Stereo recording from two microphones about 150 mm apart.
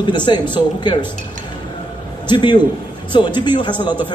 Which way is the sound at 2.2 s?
30° left (ahead or behind).